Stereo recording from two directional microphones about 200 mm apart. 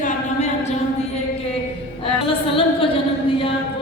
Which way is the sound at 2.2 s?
25° left (ahead or behind).